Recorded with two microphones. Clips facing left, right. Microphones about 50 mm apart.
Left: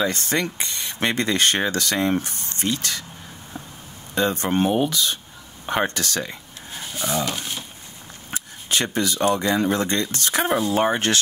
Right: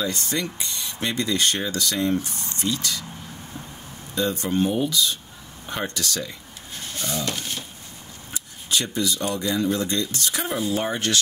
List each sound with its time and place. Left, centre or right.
0.0 s speech: left
4.1 s speech: left
6.7 s speech: centre
8.3 s a sound: left
9.6 s speech: left